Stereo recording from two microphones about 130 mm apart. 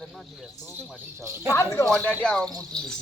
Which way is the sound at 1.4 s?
20° left (ahead or behind).